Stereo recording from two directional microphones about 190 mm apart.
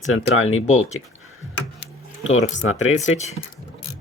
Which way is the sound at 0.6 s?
35° left (ahead or behind).